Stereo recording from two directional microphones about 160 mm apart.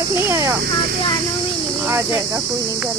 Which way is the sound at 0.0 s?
15° right (ahead or behind).